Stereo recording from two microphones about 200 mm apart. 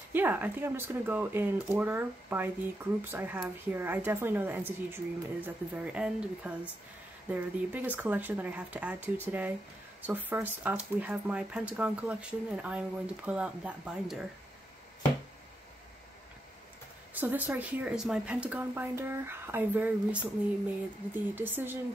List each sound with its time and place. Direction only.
0.1 s speech: 10° right (ahead or behind)
17.1 s speech: 10° right (ahead or behind)